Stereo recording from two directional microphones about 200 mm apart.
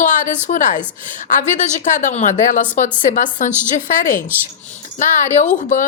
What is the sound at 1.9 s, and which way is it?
A woman's voice, 40° left (ahead or behind).